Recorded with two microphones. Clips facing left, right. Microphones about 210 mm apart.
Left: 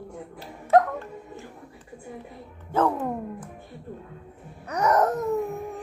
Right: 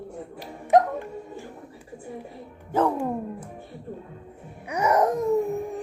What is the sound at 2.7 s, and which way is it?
Dog, 15° right (ahead or behind).